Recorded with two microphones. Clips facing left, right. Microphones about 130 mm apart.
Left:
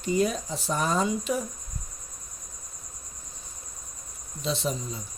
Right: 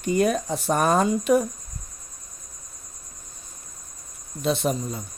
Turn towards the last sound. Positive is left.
turn(degrees=-60)  # may be behind; listen again after turning